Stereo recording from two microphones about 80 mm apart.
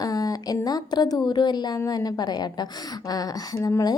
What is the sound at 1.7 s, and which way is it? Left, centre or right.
Speech, left.